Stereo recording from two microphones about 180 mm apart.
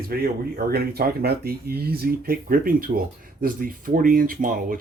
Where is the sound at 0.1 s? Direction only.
55° right (ahead or behind).